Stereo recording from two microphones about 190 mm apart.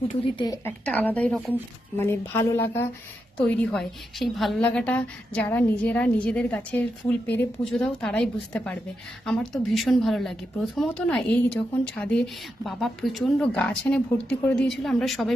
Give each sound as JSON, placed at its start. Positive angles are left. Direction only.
{"t": 0.3, "sound": "a woman's voice", "side_deg": 20}
{"t": 0.9, "sound": "a woman's voice", "side_deg": 10}